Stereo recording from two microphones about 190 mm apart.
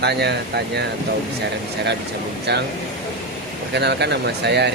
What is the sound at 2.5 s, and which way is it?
Speech, 60° right (ahead or behind).